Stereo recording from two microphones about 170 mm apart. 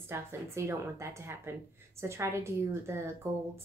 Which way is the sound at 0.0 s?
15° right (ahead or behind).